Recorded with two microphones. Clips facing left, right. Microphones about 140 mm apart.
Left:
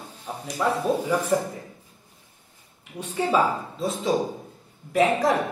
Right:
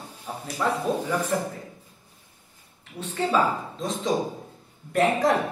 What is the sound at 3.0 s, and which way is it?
Speech, 10° left (ahead or behind).